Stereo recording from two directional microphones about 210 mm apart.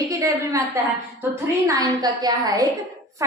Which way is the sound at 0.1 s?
15° right (ahead or behind).